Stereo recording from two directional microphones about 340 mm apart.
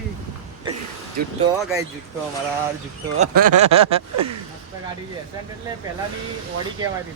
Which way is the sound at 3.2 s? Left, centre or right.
Right.